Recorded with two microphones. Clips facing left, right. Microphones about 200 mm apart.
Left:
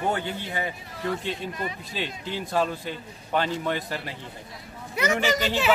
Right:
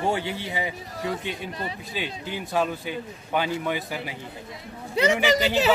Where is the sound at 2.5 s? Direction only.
5° right (ahead or behind).